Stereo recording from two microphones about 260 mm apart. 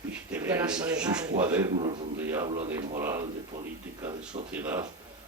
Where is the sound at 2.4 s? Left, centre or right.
Right.